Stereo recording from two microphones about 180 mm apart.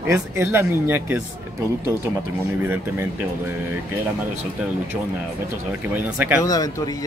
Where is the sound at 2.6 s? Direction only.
10° right (ahead or behind).